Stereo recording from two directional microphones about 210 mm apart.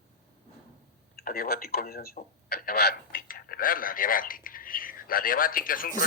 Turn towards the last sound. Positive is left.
turn(degrees=40)  # may be behind; listen again after turning